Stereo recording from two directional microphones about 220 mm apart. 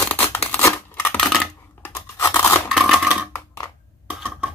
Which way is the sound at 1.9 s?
10° left (ahead or behind).